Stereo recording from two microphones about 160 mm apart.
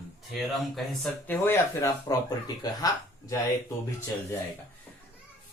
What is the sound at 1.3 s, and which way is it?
Speech, 15° left (ahead or behind).